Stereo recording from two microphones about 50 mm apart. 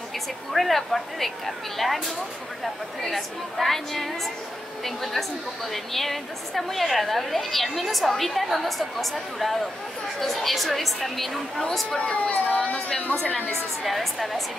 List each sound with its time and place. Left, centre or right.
0.5 s a woman's voice: centre
10.2 s a woman's voice: centre
12.0 s speech: left
12.7 s a woman's voice: centre
13.5 s a woman's voice: centre